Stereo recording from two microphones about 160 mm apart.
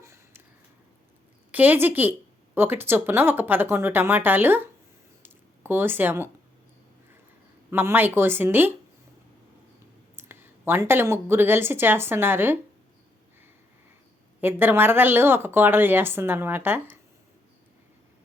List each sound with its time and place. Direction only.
0.0 s a sound: 15° right (ahead or behind)
1.5 s a woman's voice: 10° right (ahead or behind)
5.2 s a sound: 15° right (ahead or behind)
7.7 s a woman's voice: 15° right (ahead or behind)
10.2 s a woman's voice: 15° right (ahead or behind)
14.4 s a woman's voice: 15° right (ahead or behind)